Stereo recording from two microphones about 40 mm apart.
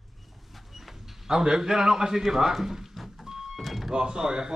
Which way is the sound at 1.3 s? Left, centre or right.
Centre.